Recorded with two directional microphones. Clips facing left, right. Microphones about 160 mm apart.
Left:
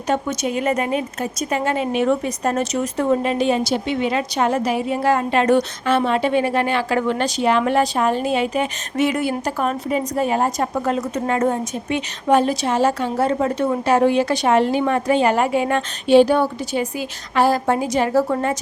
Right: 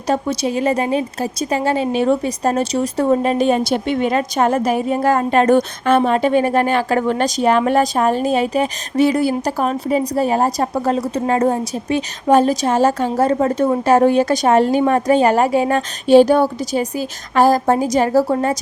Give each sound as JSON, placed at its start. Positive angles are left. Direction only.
{"t": 0.1, "sound": "a woman's voice", "side_deg": -35}